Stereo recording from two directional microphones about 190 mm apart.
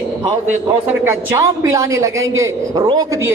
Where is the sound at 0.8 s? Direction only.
10° right (ahead or behind).